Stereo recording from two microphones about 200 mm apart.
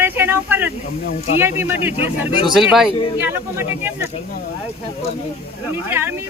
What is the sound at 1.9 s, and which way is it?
Speech, 30° left (ahead or behind).